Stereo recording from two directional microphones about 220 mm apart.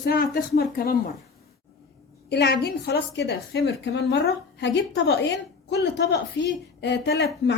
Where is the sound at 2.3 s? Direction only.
50° left (ahead or behind).